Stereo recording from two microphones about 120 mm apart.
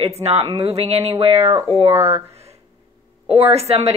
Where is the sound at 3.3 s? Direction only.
60° right (ahead or behind).